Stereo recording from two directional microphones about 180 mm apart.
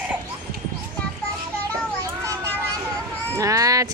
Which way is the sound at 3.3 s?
20° right (ahead or behind).